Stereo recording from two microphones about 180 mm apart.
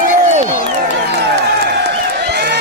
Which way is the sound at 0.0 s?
45° right (ahead or behind).